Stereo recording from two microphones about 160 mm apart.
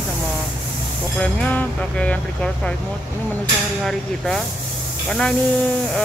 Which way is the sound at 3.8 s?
Centre (ahead or behind).